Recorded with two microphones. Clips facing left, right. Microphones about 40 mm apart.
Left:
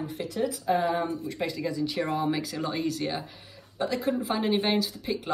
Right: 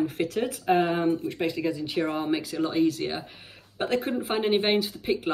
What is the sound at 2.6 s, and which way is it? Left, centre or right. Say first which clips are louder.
Speech: right 7 dB; centre.